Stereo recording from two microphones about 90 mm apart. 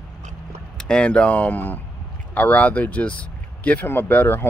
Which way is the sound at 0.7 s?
10° left (ahead or behind).